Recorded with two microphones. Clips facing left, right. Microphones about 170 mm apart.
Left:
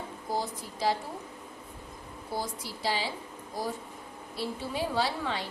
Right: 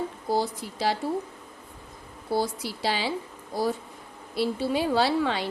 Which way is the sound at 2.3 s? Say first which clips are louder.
Right 8 dB; 75° right (ahead or behind).